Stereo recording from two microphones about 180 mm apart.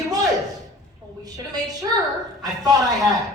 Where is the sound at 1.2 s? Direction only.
20° right (ahead or behind).